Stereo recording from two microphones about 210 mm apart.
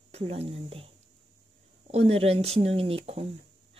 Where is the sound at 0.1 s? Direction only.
30° right (ahead or behind).